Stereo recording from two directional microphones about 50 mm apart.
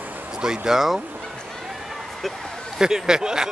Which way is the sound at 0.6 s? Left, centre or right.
Centre.